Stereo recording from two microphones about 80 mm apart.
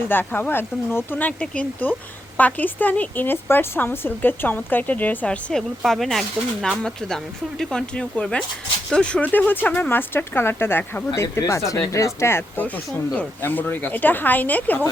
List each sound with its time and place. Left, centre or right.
0.1 s speech: left
5.8 s speech: centre
9.2 s speech: left
11.1 s speech: left
12.6 s speech: centre